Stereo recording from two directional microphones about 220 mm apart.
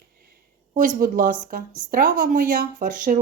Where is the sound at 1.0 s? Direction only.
40° right (ahead or behind).